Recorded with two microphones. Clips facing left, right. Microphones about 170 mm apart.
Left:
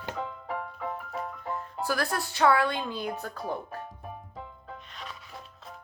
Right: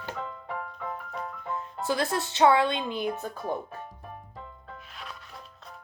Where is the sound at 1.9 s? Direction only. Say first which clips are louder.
Right 3 dB; 20° right (ahead or behind).